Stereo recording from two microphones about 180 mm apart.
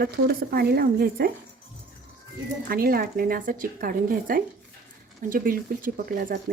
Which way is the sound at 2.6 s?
55° right (ahead or behind).